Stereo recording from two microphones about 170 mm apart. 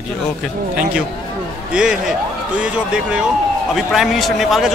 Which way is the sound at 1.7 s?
5° right (ahead or behind).